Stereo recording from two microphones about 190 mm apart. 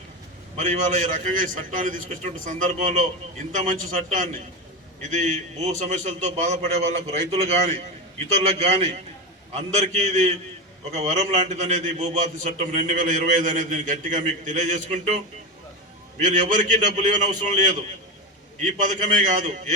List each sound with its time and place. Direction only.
0.5 s a man's voice: 35° right (ahead or behind)
5.1 s a man's voice: 40° right (ahead or behind)